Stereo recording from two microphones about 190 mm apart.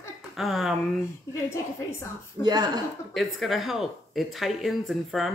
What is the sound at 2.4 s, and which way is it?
Speech, 20° right (ahead or behind).